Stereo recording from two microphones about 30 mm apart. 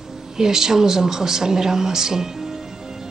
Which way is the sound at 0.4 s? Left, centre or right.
Centre.